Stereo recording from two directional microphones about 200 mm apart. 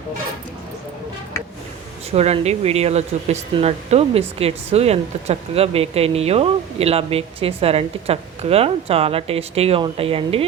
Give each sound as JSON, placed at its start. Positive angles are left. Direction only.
{"t": 2.0, "sound": "speech", "side_deg": -30}